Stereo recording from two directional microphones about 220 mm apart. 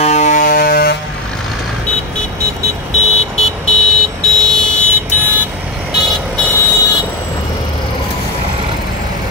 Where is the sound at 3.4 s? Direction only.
Centre (ahead or behind).